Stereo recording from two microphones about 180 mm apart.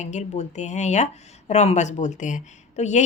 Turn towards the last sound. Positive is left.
turn(degrees=40)  # may be behind; listen again after turning